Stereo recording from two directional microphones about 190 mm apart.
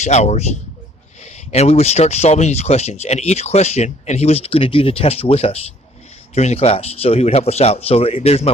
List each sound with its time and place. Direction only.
0.0 s speech: 35° left (ahead or behind)